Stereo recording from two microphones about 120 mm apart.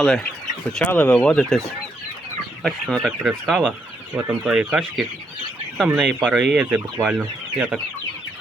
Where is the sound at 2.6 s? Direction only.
5° left (ahead or behind).